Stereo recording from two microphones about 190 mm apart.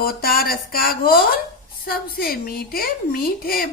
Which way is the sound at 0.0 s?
50° left (ahead or behind).